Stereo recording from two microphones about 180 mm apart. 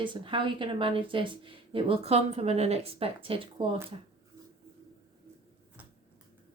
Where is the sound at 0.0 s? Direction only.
25° right (ahead or behind).